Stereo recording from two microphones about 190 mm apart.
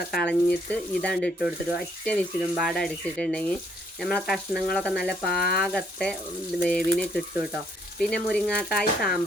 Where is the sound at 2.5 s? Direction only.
Centre (ahead or behind).